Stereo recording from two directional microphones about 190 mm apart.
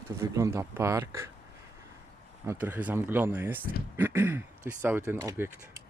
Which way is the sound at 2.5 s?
10° right (ahead or behind).